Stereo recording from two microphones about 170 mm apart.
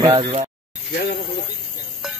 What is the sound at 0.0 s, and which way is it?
Speech, 30° right (ahead or behind).